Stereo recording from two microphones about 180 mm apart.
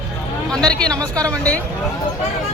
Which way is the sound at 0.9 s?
20° right (ahead or behind).